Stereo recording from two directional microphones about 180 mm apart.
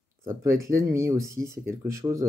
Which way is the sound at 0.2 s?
15° right (ahead or behind).